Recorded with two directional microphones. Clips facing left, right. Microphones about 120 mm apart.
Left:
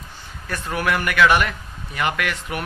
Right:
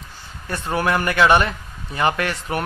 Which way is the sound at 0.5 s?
30° right (ahead or behind).